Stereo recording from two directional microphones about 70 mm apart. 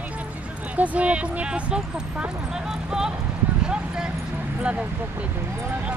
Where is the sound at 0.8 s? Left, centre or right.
Centre.